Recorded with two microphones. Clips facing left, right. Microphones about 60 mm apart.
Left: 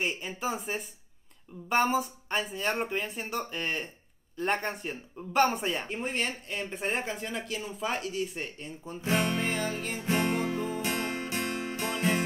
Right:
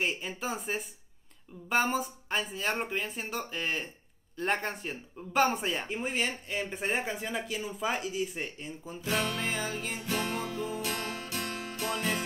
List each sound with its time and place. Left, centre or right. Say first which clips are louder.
0.0 s speech: left 1 dB; centre
9.0 s music: left 3 dB; left
9.4 s speech: left 2 dB; centre
9.9 s music: left 6 dB; left